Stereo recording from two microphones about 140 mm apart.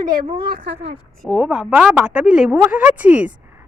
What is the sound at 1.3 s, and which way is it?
A woman's voice, 10° right (ahead or behind).